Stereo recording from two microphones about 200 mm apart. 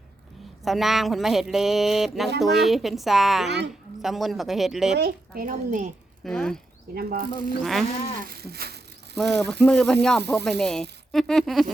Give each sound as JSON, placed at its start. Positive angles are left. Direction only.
{"t": 0.6, "sound": "speech", "side_deg": 0}
{"t": 4.9, "sound": "speech", "side_deg": -50}
{"t": 6.2, "sound": "speech", "side_deg": 0}
{"t": 6.9, "sound": "speech", "side_deg": -50}
{"t": 7.6, "sound": "speech", "side_deg": 0}
{"t": 8.3, "sound": "speech", "side_deg": -50}
{"t": 9.1, "sound": "speech", "side_deg": 0}